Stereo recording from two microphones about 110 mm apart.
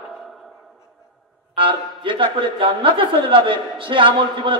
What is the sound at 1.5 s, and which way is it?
Speech, 50° right (ahead or behind).